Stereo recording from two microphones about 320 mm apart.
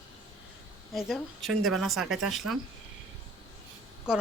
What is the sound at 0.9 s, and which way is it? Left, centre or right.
Speech, centre.